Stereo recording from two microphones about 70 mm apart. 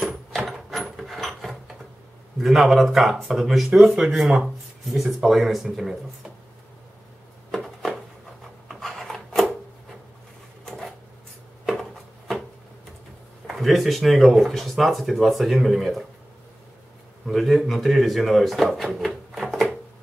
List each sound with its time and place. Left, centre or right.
0.3 s a sound: centre
2.4 s speech: centre
3.7 s speech: centre
7.5 s a sound: centre
13.5 s speech: centre
17.3 s speech: centre